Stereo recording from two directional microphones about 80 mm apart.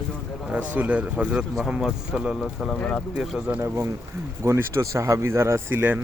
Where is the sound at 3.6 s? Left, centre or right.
Right.